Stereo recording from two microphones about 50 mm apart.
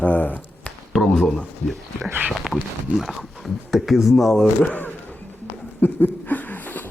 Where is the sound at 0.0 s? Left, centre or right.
Left.